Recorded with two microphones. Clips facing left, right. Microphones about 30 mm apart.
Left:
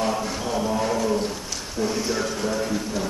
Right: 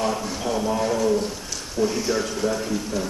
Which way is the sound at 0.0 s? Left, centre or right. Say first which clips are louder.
Even; centre.